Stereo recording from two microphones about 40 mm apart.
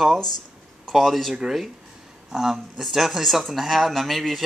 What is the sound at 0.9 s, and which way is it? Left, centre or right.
Speech, centre.